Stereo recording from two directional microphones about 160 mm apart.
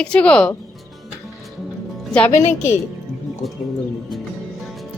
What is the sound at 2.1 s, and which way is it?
Speech, 5° left (ahead or behind).